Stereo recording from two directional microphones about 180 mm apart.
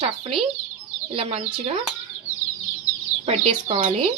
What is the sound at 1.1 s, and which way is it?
Speech, 30° right (ahead or behind).